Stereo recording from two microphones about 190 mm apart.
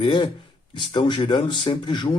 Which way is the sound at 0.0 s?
25° left (ahead or behind).